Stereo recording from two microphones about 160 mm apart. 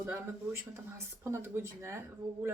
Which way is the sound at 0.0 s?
15° right (ahead or behind).